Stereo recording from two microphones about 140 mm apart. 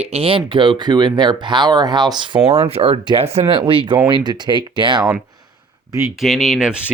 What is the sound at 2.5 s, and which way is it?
Speech, 45° right (ahead or behind).